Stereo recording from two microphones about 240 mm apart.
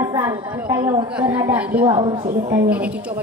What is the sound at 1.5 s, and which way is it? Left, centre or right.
Speech, centre.